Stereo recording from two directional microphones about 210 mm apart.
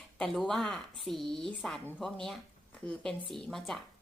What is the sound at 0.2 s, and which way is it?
A woman's voice, 5° left (ahead or behind).